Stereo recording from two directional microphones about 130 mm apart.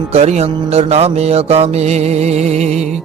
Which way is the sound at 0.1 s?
55° right (ahead or behind).